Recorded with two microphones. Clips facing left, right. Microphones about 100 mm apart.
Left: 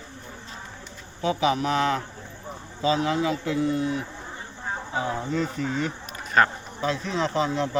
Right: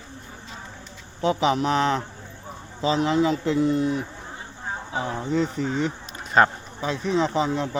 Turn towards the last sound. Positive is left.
turn(degrees=-15)  # may be behind; listen again after turning